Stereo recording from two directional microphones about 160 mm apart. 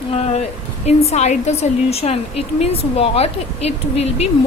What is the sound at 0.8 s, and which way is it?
Speech, 40° left (ahead or behind).